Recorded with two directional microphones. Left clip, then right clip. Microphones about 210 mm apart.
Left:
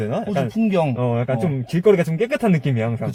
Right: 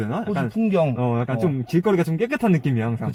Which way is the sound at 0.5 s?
20° left (ahead or behind).